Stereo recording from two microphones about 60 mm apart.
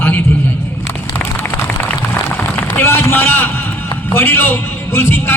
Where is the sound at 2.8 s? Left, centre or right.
Left.